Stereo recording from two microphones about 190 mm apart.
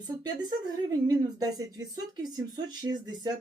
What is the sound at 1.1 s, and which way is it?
Speech, 20° right (ahead or behind).